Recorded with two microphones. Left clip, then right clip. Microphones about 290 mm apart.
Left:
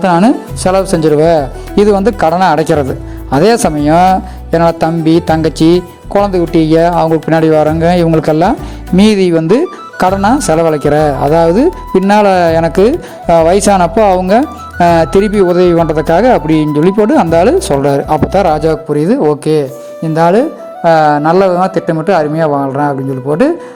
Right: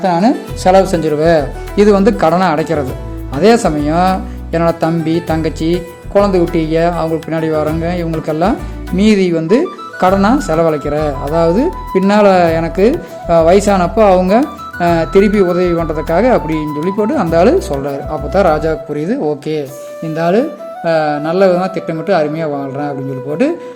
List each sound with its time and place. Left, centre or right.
0.0 s speech: left